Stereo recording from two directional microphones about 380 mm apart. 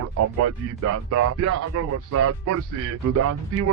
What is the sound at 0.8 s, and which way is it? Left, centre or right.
A man's voice, right.